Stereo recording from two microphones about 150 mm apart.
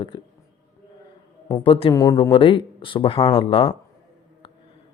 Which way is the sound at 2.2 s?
35° left (ahead or behind).